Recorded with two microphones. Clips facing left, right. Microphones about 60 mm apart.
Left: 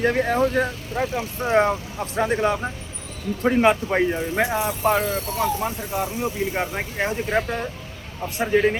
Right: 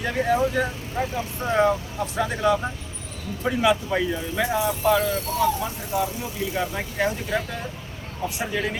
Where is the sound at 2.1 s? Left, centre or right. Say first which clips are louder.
Left 1 dB; left.